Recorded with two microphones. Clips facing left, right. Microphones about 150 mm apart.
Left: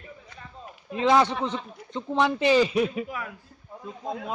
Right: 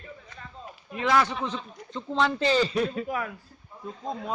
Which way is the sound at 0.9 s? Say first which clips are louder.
Left 3 dB; 25° left (ahead or behind).